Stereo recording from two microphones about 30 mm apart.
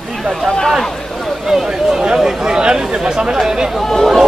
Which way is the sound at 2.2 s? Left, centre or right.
Right.